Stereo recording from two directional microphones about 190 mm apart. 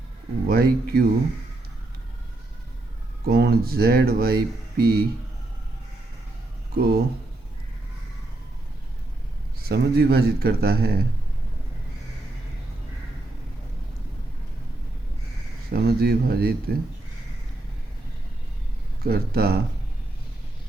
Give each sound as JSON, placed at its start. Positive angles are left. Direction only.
{"t": 0.4, "sound": "speech", "side_deg": -55}
{"t": 3.2, "sound": "speech", "side_deg": -55}
{"t": 6.7, "sound": "speech", "side_deg": -55}
{"t": 9.6, "sound": "speech", "side_deg": -55}
{"t": 15.7, "sound": "speech", "side_deg": -55}
{"t": 19.0, "sound": "speech", "side_deg": -55}